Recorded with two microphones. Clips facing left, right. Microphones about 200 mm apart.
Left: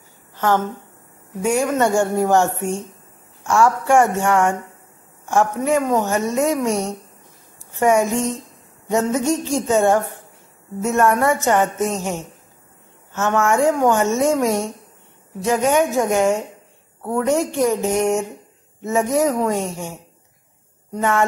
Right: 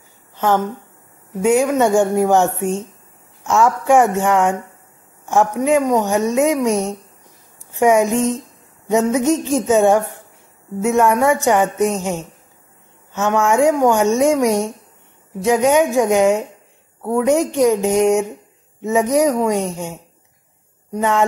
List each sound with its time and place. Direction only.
1.4 s a woman's voice: 15° right (ahead or behind)